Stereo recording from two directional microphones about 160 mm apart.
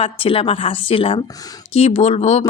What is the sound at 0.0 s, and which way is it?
Speech, 35° left (ahead or behind).